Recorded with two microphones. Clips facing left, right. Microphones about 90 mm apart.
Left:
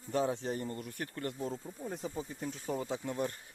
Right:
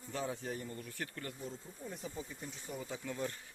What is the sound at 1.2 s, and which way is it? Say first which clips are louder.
Speech: left 7 dB; 35° left (ahead or behind).